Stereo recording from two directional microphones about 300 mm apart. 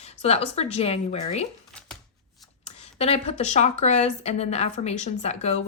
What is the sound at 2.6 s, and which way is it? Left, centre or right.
Speech, left.